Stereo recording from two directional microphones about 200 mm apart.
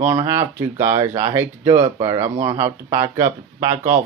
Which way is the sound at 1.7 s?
25° right (ahead or behind).